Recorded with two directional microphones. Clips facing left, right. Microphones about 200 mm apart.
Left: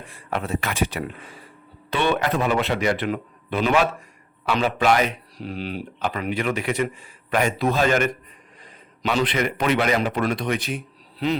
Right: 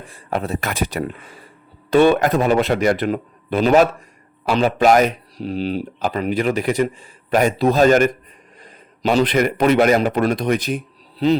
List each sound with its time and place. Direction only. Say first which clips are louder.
0.1 s a man's voice: right 3 dB; 40° right (ahead or behind)